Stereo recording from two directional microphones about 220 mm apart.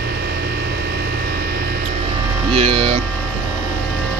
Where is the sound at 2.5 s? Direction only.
25° right (ahead or behind).